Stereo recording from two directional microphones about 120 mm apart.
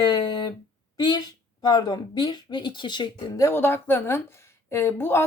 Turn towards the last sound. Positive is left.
turn(degrees=20)  # may be behind; listen again after turning